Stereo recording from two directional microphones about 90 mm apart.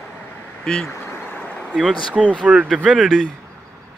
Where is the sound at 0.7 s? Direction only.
5° left (ahead or behind).